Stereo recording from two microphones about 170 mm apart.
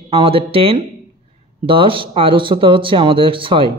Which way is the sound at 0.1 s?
35° right (ahead or behind).